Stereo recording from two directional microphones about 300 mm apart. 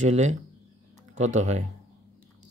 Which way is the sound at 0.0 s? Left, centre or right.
Right.